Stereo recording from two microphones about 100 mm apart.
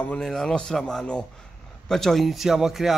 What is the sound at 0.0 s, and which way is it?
A man's voice, 15° left (ahead or behind).